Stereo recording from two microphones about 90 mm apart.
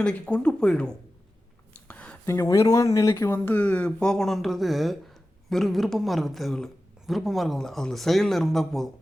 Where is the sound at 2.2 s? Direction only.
35° left (ahead or behind).